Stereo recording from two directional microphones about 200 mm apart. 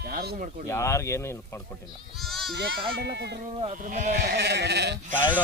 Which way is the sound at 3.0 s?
55° right (ahead or behind).